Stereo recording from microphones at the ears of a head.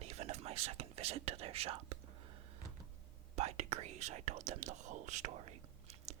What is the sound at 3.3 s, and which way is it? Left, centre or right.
Whispering, right.